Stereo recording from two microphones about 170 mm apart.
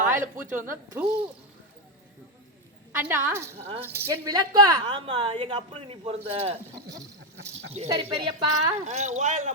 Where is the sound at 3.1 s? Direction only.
15° right (ahead or behind).